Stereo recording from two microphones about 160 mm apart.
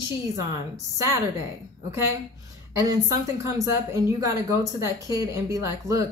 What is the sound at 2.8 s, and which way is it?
Speech, 20° right (ahead or behind).